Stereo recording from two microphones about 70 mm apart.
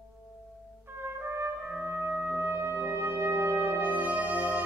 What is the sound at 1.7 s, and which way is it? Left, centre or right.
Music, right.